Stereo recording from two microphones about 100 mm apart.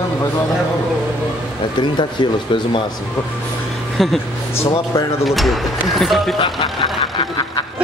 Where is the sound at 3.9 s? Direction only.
Centre (ahead or behind).